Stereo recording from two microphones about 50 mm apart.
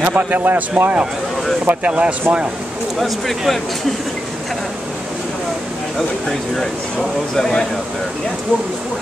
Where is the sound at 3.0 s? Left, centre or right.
Centre.